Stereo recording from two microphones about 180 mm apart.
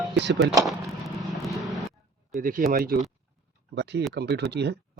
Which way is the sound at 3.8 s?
70° right (ahead or behind).